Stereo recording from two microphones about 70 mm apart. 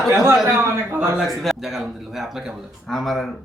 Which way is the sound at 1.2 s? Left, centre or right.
Centre.